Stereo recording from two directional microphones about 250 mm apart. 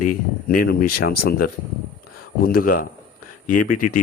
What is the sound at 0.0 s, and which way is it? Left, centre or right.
Speech, left.